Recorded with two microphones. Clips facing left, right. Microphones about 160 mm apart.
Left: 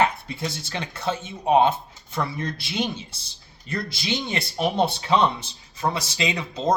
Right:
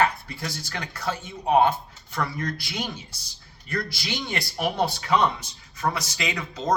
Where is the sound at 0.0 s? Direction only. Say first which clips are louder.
Left 1 dB; 20° left (ahead or behind).